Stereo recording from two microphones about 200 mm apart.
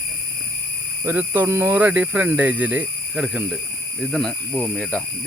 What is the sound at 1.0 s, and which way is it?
Speech, 10° right (ahead or behind).